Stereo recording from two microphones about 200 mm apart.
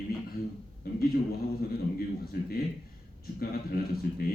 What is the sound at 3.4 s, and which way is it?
Speech, 50° left (ahead or behind).